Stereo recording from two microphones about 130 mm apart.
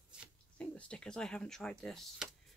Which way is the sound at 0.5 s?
10° left (ahead or behind).